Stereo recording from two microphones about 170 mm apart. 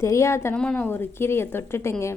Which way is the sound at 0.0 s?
15° left (ahead or behind).